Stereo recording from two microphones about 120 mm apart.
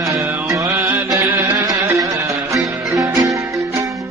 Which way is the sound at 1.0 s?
30° right (ahead or behind).